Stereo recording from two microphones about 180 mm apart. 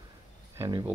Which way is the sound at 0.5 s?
20° right (ahead or behind).